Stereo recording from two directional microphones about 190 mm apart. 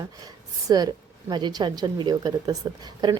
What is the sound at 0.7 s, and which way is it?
A woman's voice, 20° right (ahead or behind).